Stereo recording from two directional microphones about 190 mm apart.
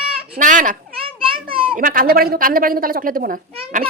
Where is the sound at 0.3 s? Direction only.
40° right (ahead or behind).